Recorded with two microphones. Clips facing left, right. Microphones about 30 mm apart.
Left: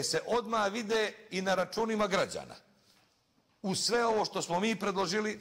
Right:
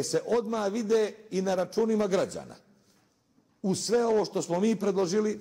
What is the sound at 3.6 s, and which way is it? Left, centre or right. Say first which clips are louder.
Speech: right 4 dB; left.